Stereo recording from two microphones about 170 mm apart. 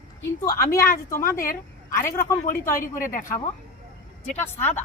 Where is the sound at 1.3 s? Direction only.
55° left (ahead or behind).